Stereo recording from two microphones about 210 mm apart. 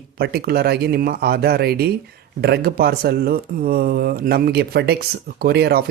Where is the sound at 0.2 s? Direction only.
45° right (ahead or behind).